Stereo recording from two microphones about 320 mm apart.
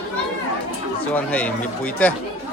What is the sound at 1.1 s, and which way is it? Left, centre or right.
Speech, centre.